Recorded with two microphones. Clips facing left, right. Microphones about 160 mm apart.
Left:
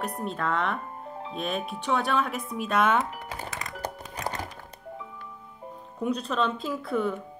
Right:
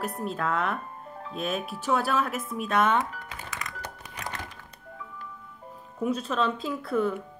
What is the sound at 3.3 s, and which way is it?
Music, 30° left (ahead or behind).